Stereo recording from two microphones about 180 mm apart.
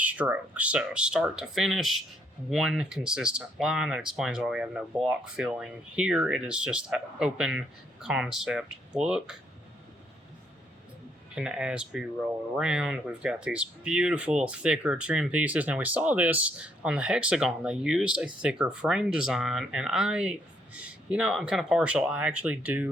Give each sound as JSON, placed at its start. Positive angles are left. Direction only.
{"t": 0.0, "sound": "speech", "side_deg": -10}
{"t": 11.3, "sound": "speech", "side_deg": -5}